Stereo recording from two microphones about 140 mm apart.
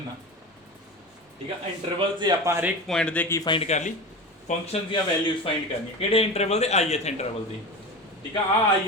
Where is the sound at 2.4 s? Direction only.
20° right (ahead or behind).